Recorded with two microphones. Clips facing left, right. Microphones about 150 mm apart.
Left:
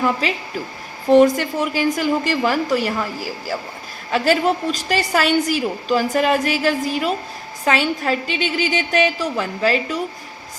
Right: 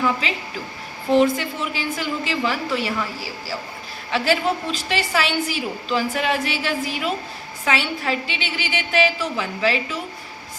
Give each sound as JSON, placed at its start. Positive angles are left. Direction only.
{"t": 0.0, "sound": "a woman's voice", "side_deg": 45}
{"t": 1.4, "sound": "a woman's voice", "side_deg": 45}